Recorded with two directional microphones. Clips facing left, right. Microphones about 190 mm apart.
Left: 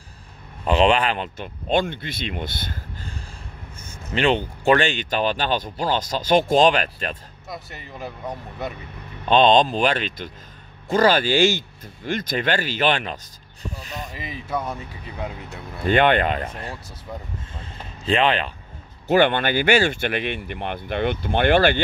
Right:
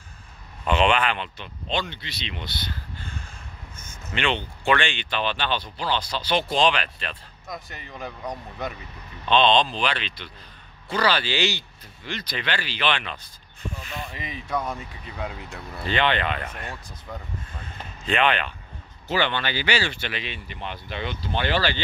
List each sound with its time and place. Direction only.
0.7 s speech: 35° left (ahead or behind)
7.4 s speech: 5° left (ahead or behind)
9.3 s speech: 45° left (ahead or behind)
14.3 s speech: 5° left (ahead or behind)
15.8 s speech: 50° left (ahead or behind); by 18.5 s 35° left (ahead or behind)
19.0 s speech: 50° left (ahead or behind)